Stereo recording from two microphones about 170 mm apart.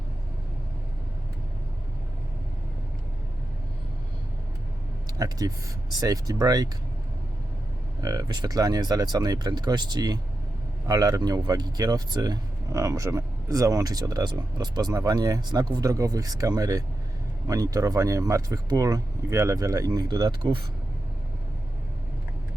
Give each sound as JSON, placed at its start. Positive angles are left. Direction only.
{"t": 5.1, "sound": "speech", "side_deg": -20}
{"t": 8.0, "sound": "speech", "side_deg": -25}